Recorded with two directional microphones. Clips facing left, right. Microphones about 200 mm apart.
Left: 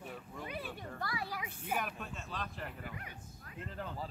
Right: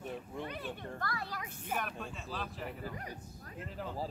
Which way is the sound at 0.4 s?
10° left (ahead or behind).